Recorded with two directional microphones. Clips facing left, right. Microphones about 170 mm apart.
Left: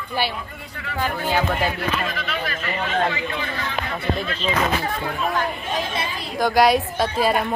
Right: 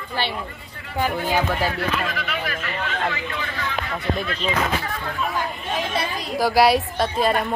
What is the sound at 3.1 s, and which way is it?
Speech, 25° left (ahead or behind).